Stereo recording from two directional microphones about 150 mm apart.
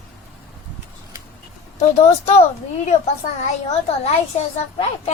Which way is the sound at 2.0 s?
50° left (ahead or behind).